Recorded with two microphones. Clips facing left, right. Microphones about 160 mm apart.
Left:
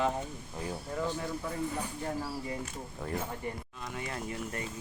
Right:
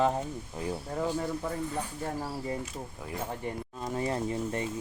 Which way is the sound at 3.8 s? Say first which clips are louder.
Right 8 dB; 35° right (ahead or behind).